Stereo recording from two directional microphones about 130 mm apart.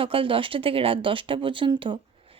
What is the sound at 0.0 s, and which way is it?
A woman's voice, 45° right (ahead or behind).